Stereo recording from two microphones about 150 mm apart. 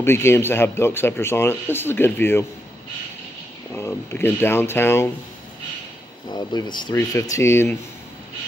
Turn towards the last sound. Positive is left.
turn(degrees=15)  # may be behind; listen again after turning